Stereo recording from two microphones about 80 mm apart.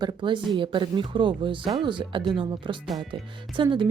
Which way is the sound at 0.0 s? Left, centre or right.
Right.